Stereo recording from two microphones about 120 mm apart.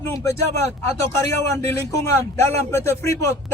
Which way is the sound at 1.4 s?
25° left (ahead or behind).